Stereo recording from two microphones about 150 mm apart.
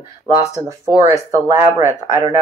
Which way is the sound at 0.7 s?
20° right (ahead or behind).